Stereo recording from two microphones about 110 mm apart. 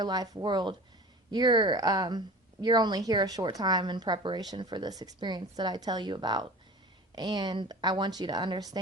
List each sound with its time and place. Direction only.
0.0 s a woman's voice: 35° right (ahead or behind)